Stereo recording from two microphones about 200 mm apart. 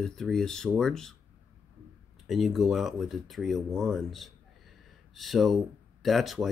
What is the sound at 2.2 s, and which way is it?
Speech, centre (ahead or behind).